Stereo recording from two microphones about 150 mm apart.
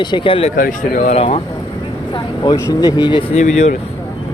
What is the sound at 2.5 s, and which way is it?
Speech, 25° left (ahead or behind).